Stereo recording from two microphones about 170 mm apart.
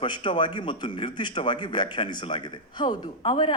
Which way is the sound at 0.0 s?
30° left (ahead or behind).